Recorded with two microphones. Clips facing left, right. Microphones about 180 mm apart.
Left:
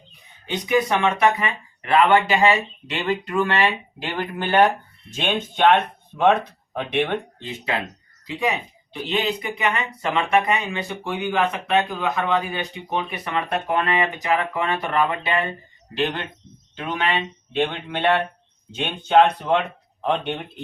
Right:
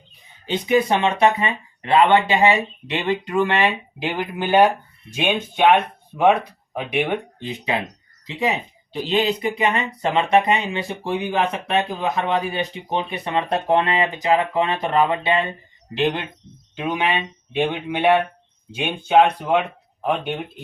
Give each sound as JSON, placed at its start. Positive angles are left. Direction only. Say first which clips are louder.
{"t": 0.4, "sound": "speech", "louder": "right 2 dB", "side_deg": -25}
{"t": 9.0, "sound": "speech", "louder": "right 4 dB", "side_deg": -25}